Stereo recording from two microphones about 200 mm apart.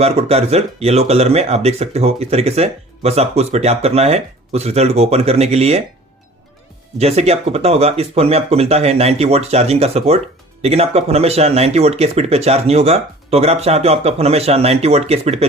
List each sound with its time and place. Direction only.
0.0 s speech: 30° right (ahead or behind)
7.0 s speech: 30° right (ahead or behind)